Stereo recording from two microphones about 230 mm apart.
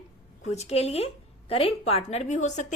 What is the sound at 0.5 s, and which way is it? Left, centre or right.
A woman's voice, left.